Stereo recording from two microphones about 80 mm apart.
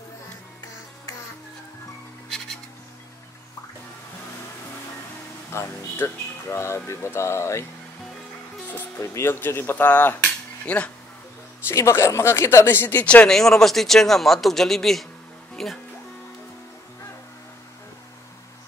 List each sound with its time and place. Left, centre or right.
5.5 s speech: left
9.0 s speech: left; by 10.9 s centre
11.6 s speech: left
13.0 s speech: centre